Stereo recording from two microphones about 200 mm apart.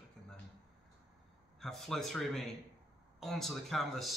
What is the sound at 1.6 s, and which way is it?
Speech, centre (ahead or behind).